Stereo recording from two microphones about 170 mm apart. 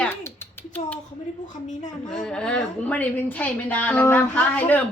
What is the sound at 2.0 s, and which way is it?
Speech, 5° left (ahead or behind).